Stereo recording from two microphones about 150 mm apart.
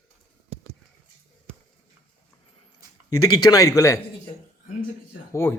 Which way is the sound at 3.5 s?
20° left (ahead or behind).